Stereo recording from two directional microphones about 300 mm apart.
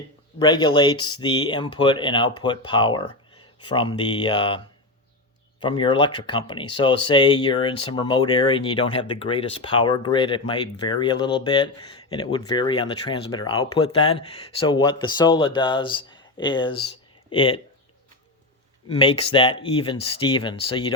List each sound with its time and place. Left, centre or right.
0.3 s speech: centre
5.6 s speech: centre
18.9 s speech: centre